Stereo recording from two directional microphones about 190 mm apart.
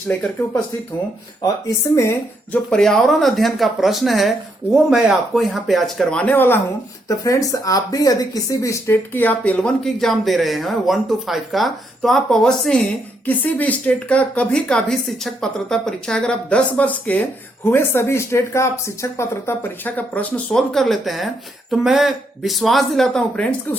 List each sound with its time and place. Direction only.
0.1 s speech: centre (ahead or behind)
2.0 s speech: 15° left (ahead or behind)
2.6 s speech: 5° left (ahead or behind)